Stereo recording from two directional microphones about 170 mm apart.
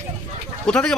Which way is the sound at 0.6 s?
5° left (ahead or behind).